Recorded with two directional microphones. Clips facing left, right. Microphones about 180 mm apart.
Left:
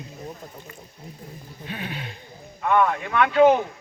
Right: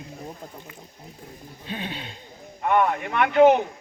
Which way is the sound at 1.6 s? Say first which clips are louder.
Even; 30° right (ahead or behind).